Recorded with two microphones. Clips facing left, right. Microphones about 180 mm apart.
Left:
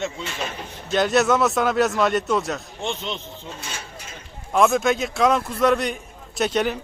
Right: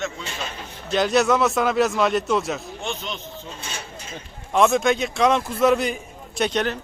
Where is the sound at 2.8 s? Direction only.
25° left (ahead or behind).